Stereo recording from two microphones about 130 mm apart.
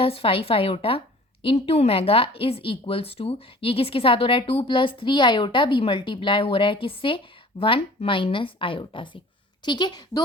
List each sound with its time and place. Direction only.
0.0 s a woman's voice: 45° left (ahead or behind)